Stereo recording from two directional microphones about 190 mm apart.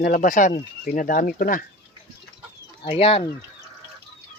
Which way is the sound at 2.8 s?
30° left (ahead or behind).